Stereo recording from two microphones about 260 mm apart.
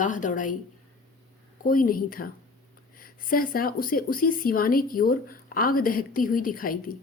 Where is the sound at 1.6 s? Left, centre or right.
Left.